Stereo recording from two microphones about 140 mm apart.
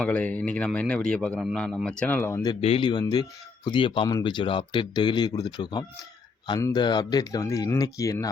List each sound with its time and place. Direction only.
0.0 s a man's voice: 10° left (ahead or behind)
2.6 s speech: 45° left (ahead or behind); by 8.3 s 20° left (ahead or behind)